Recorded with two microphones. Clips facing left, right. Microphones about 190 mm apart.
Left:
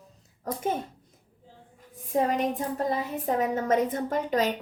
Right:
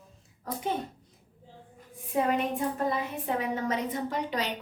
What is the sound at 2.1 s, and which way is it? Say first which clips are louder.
A woman's voice: left 2 dB; 40° left (ahead or behind).